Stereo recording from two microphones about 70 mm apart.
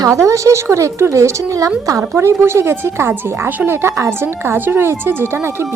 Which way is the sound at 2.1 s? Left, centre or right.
Right.